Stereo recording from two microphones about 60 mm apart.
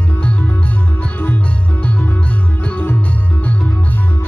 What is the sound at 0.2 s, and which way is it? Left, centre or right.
Music, left.